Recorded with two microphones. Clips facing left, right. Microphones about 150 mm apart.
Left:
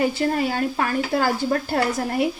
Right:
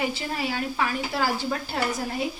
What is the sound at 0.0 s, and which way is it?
A woman's voice, 50° left (ahead or behind).